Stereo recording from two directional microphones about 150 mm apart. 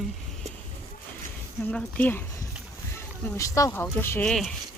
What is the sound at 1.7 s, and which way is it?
Speech, 10° left (ahead or behind).